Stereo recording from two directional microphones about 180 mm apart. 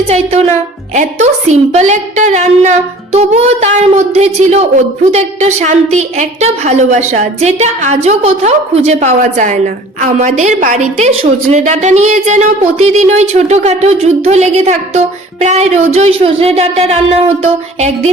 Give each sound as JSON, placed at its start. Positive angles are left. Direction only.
{"t": 0.1, "sound": "a woman's voice", "side_deg": -40}